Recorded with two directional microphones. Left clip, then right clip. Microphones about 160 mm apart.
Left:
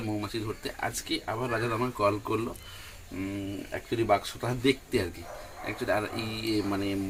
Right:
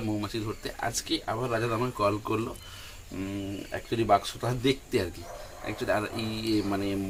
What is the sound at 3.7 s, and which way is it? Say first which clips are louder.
Speech: right 2 dB; 5° left (ahead or behind).